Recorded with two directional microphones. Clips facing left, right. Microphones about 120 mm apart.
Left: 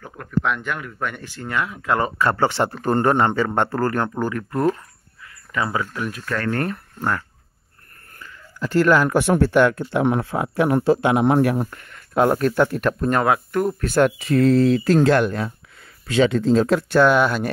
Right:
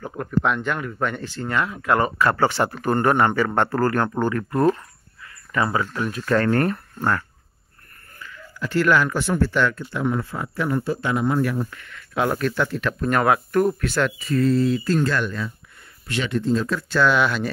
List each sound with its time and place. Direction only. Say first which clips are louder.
0.2 s speech: right 1 dB; centre (ahead or behind); by 4.1 s 20° left (ahead or behind)
4.2 s speech: right 2 dB; 5° left (ahead or behind)
4.5 s speech: right 1 dB; 20° right (ahead or behind)
5.5 s speech: right 2 dB; 15° left (ahead or behind)
6.2 s speech: right 7 dB; 20° right (ahead or behind)
6.5 s speech: right 3 dB; centre (ahead or behind)
8.5 s speech: left 3 dB; 40° left (ahead or behind)
9.8 s speech: left 4 dB; 70° left (ahead or behind)
11.7 s speech: left 5 dB; 45° left (ahead or behind)
13.0 s speech: right 1 dB; 25° left (ahead or behind)
13.8 s speech: left 5 dB; 45° left (ahead or behind)
14.1 s speech: left 4 dB; 75° left (ahead or behind)
16.4 s speech: left 5 dB; 90° left
16.9 s speech: left 2 dB; 50° left (ahead or behind)